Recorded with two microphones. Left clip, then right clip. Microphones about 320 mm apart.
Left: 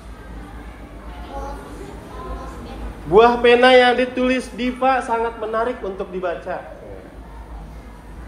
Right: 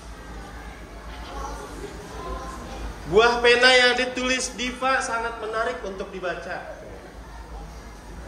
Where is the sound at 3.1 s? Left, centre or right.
Centre.